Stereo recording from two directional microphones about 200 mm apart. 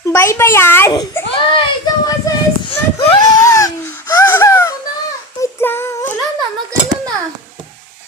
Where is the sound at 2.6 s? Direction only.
25° left (ahead or behind).